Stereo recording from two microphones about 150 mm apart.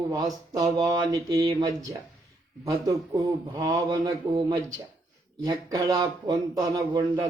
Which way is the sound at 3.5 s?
25° right (ahead or behind).